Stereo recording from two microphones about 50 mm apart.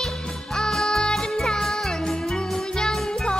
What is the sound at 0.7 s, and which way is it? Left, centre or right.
Music, centre.